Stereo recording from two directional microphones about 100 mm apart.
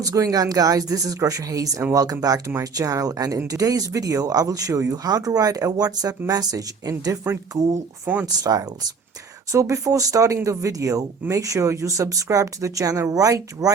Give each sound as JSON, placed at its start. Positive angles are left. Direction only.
{"t": 0.0, "sound": "speech", "side_deg": -35}
{"t": 8.0, "sound": "speech", "side_deg": -15}
{"t": 9.5, "sound": "speech", "side_deg": -30}